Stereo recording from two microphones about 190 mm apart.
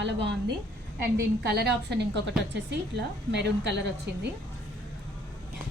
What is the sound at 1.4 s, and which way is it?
Speech, 60° right (ahead or behind).